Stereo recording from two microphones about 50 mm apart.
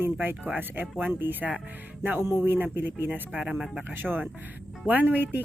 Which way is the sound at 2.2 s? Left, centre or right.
Right.